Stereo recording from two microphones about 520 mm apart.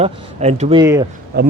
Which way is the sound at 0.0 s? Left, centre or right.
Centre.